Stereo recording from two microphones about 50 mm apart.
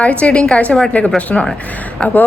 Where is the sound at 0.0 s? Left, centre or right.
Left.